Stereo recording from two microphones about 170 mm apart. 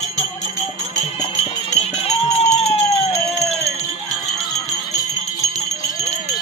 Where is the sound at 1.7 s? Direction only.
40° left (ahead or behind).